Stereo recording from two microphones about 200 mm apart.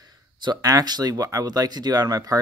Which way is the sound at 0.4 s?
20° right (ahead or behind).